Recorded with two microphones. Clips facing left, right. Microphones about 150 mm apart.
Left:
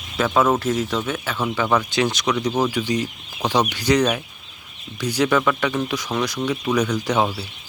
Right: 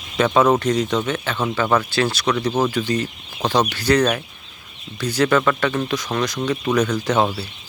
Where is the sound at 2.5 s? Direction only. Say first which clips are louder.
Right 1 dB; centre (ahead or behind).